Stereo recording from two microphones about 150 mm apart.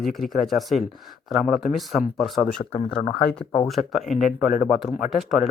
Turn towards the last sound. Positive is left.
turn(degrees=0)  # may be behind; listen again after turning